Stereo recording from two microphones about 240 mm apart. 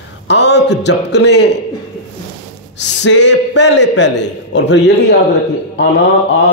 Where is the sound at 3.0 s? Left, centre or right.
Left.